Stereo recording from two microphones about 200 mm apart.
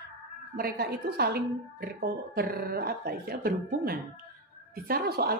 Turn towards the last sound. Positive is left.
turn(degrees=-50)  # may be behind; listen again after turning